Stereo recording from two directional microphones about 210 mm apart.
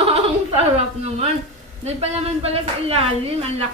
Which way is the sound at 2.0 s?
30° right (ahead or behind).